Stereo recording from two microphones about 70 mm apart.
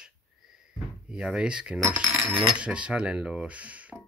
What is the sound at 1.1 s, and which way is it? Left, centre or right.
Speech, centre.